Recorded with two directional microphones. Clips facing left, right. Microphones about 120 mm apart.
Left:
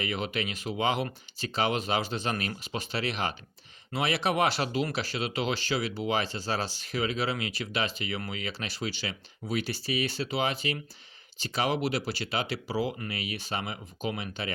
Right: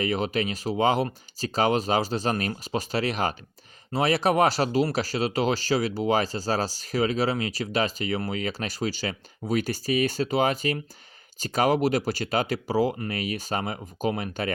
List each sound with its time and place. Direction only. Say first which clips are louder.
0.0 s speech: right 6 dB; 40° right (ahead or behind)